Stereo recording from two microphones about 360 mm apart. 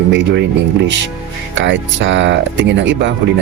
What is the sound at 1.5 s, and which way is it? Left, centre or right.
Speech, right.